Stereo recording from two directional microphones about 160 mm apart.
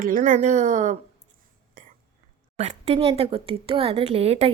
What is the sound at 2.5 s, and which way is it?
Speech, 45° right (ahead or behind).